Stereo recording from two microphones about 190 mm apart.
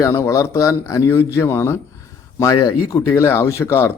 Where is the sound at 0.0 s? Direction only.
15° left (ahead or behind).